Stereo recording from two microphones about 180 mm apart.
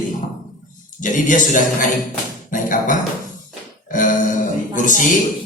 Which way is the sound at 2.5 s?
45° left (ahead or behind).